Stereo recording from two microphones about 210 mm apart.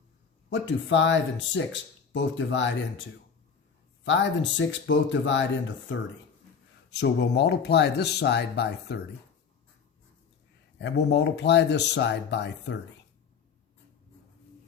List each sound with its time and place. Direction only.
0.5 s speech: 60° left (ahead or behind)
10.8 s speech: 55° left (ahead or behind)